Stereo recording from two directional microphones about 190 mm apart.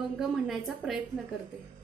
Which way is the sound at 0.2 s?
Centre (ahead or behind).